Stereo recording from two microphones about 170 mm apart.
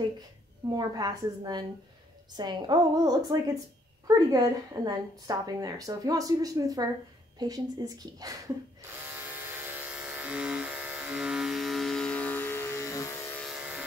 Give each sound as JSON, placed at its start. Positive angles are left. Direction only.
{"t": 0.7, "sound": "a woman's voice", "side_deg": -25}
{"t": 9.3, "sound": "electric toothbrush", "side_deg": -10}
{"t": 13.4, "sound": "a sound", "side_deg": -5}